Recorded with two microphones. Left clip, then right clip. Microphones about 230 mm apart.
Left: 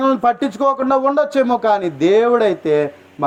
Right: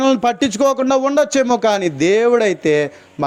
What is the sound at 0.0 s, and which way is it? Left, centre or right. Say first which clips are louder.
Speech: even; right.